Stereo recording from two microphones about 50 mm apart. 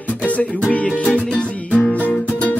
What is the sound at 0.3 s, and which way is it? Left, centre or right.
Music, left.